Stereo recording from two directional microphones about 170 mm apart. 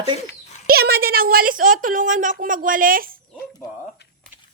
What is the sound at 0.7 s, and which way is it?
A woman's voice, 65° right (ahead or behind).